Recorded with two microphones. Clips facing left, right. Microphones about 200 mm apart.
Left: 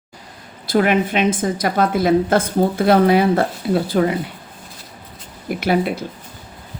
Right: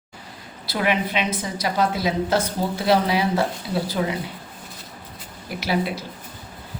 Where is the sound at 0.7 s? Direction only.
50° left (ahead or behind).